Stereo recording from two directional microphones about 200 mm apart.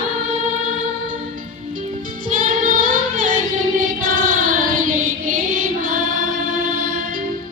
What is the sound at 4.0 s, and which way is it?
Child singing, 45° right (ahead or behind).